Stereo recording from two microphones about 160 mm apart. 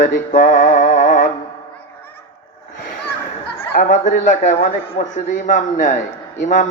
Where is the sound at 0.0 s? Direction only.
55° left (ahead or behind).